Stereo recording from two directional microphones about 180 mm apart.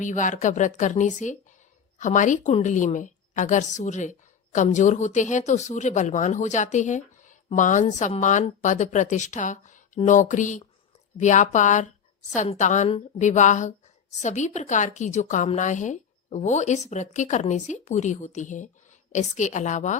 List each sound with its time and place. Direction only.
0.0 s speech: 45° left (ahead or behind)